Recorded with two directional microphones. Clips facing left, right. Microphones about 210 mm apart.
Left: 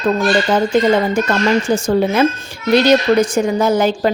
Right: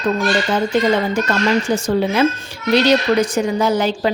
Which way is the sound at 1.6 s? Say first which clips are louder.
Left 3 dB; 50° left (ahead or behind).